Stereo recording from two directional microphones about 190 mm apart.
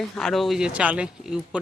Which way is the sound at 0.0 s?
Centre (ahead or behind).